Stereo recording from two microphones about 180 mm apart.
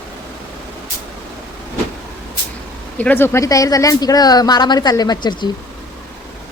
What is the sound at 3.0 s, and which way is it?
Speech, 10° left (ahead or behind).